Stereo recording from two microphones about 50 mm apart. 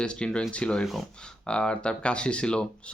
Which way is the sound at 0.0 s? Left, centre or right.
Centre.